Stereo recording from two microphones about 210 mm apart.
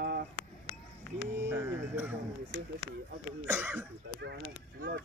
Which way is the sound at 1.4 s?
10° right (ahead or behind).